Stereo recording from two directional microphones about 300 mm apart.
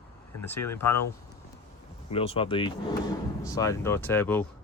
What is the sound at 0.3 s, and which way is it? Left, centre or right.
Speech, centre.